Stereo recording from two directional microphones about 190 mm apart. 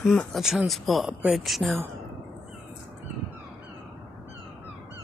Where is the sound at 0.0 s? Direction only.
5° left (ahead or behind).